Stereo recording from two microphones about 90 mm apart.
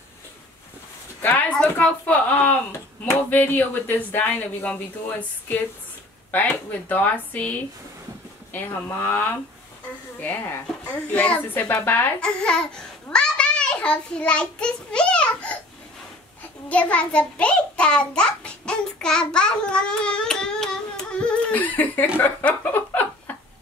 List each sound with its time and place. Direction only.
1.2 s a woman's voice: 20° left (ahead or behind)
16.6 s a child's voice: 15° left (ahead or behind)
22.4 s a sound: 20° left (ahead or behind)